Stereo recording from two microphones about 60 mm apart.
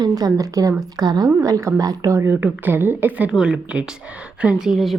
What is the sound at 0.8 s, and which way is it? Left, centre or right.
A woman's voice, right.